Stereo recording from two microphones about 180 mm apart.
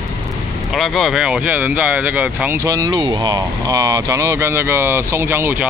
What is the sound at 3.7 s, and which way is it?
Speech, 15° right (ahead or behind).